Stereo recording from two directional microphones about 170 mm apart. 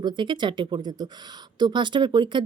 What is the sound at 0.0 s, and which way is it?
Speech, 30° right (ahead or behind).